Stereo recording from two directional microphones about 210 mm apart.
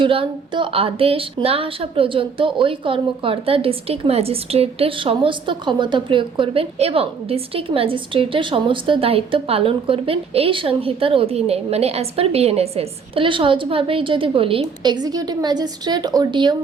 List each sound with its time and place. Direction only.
0.0 s a woman's voice: 25° right (ahead or behind)